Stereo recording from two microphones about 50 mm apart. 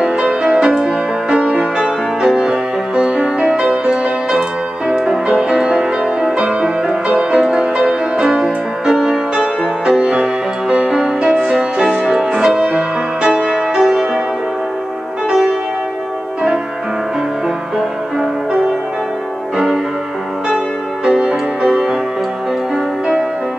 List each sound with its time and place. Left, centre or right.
0.0 s music: right
3.9 s music: centre
9.8 s music: centre
15.2 s music: centre
19.5 s music: centre